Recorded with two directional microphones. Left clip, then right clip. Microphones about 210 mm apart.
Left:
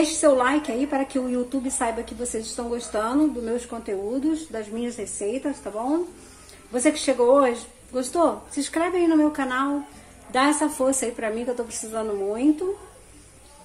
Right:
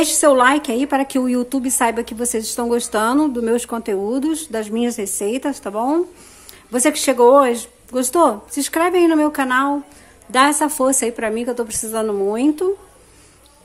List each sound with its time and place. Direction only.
0.0 s a woman's voice: 45° right (ahead or behind)